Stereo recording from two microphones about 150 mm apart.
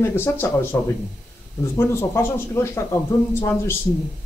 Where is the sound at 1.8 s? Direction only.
15° left (ahead or behind).